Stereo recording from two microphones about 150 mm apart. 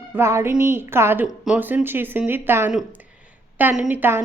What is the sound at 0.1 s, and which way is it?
A woman's voice, 15° right (ahead or behind).